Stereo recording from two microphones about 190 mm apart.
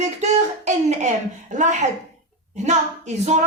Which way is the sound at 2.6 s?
35° right (ahead or behind).